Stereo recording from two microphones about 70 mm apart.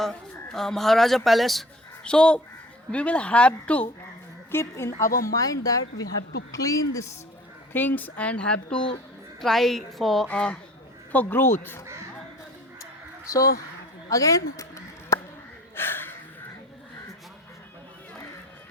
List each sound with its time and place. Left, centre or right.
0.0 s speech: centre
2.0 s speech: centre
4.5 s a woman's voice: left
7.7 s speech: left
9.4 s speech: centre
10.2 s speech: centre
11.1 s speech: left
12.8 s a sound: left
15.7 s a sound: left